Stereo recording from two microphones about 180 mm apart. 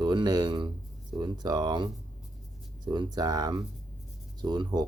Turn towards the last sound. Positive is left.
turn(degrees=-25)  # may be behind; listen again after turning